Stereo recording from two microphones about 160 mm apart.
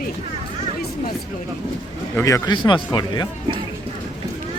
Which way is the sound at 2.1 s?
20° left (ahead or behind).